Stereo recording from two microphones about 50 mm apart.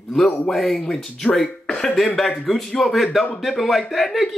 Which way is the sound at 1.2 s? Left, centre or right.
Left.